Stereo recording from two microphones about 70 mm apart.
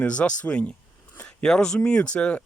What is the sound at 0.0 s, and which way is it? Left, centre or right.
Speech, centre.